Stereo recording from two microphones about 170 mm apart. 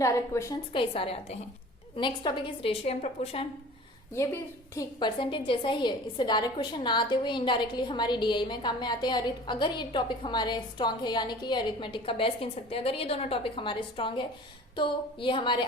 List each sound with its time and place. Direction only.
0.0 s a woman's voice: 15° left (ahead or behind)
0.7 s a woman's voice: 30° left (ahead or behind)
4.1 s a woman's voice: 15° left (ahead or behind)
4.9 s a woman's voice: 30° left (ahead or behind)